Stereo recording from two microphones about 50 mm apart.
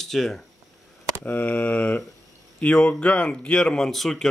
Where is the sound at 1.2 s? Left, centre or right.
Left.